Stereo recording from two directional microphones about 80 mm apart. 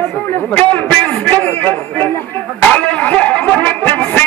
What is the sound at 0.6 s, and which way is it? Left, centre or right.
A man's voice, centre.